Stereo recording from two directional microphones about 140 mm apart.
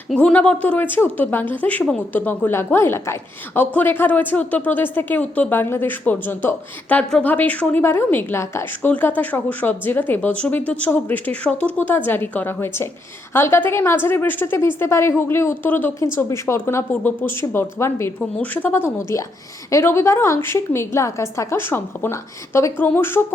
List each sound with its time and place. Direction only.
0.1 s a woman's voice: 5° left (ahead or behind)